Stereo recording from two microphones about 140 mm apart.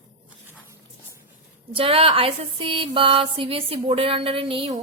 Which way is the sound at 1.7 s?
45° right (ahead or behind).